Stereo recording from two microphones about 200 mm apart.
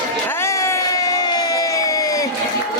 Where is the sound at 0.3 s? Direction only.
15° left (ahead or behind).